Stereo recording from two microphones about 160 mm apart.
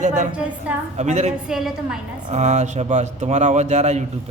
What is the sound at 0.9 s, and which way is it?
Speech, 45° right (ahead or behind).